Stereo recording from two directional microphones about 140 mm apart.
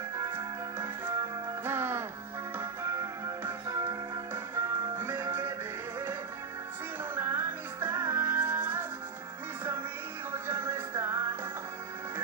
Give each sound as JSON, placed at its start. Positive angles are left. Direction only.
{"t": 0.2, "sound": "music", "side_deg": -20}
{"t": 7.2, "sound": "music", "side_deg": -15}
{"t": 10.3, "sound": "music", "side_deg": -20}